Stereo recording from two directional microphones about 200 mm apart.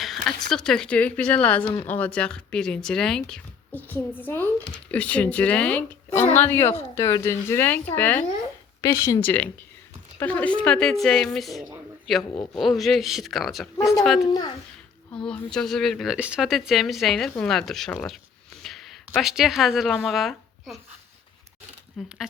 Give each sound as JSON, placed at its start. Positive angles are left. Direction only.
{"t": 0.0, "sound": "speech", "side_deg": 0}
{"t": 14.3, "sound": "a child's voice", "side_deg": 20}
{"t": 15.3, "sound": "speech", "side_deg": 5}
{"t": 18.6, "sound": "a sound", "side_deg": 0}
{"t": 19.1, "sound": "speech", "side_deg": 0}
{"t": 22.0, "sound": "speech", "side_deg": 0}